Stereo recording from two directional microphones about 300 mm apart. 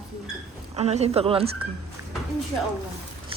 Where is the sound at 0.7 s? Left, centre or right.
Right.